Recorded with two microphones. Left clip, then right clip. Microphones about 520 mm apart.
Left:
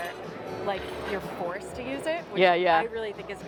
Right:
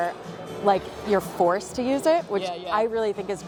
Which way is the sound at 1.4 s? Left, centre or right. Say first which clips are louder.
Right 11 dB; right.